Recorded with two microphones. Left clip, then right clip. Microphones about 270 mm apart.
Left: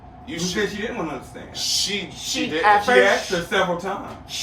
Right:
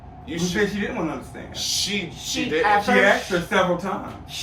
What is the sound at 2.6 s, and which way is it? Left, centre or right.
Speech, left.